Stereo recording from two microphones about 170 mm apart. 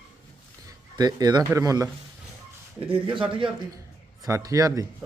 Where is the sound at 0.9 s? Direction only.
25° right (ahead or behind).